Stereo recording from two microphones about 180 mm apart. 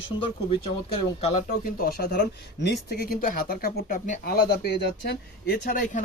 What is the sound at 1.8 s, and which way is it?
Speech, 55° left (ahead or behind).